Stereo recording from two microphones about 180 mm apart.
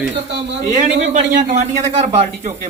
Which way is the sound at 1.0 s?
40° right (ahead or behind).